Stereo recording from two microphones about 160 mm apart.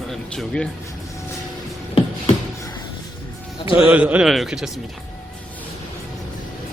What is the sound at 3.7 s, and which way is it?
Speech, 10° right (ahead or behind).